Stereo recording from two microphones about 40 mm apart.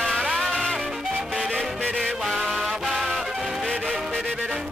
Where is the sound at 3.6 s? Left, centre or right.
Centre.